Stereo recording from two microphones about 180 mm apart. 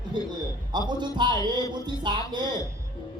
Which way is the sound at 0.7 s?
25° right (ahead or behind).